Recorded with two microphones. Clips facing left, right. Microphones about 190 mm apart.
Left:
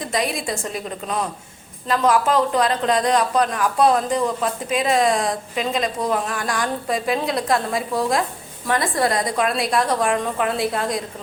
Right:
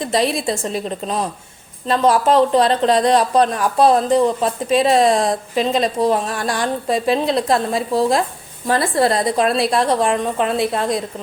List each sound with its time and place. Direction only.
0.0 s a woman's voice: 30° right (ahead or behind)